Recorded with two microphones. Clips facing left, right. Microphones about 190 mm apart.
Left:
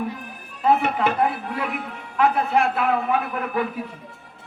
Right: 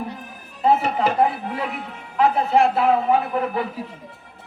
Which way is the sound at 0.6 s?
30° right (ahead or behind).